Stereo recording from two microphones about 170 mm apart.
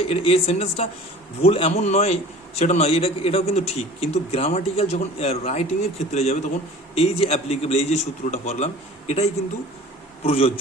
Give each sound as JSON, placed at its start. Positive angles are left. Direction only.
{"t": 0.0, "sound": "a man's voice", "side_deg": 35}